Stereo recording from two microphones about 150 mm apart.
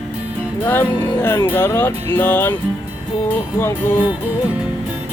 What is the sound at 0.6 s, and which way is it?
Speech, 15° left (ahead or behind).